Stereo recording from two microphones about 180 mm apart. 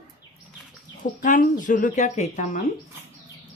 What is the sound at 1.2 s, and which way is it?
Speech, 45° left (ahead or behind).